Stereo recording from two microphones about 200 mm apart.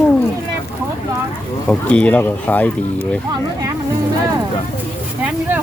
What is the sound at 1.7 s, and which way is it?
Speech, 5° left (ahead or behind).